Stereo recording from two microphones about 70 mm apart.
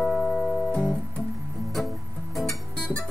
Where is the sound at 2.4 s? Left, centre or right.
Centre.